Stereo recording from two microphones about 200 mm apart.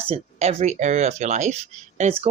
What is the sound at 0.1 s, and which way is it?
Speech, 35° right (ahead or behind).